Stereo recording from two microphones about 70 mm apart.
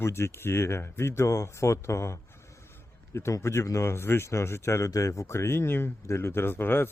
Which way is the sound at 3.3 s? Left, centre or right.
Left.